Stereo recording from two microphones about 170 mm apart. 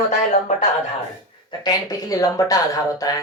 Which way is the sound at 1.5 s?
20° left (ahead or behind).